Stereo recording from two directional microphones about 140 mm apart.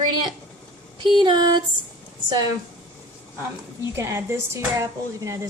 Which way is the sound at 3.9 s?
20° right (ahead or behind).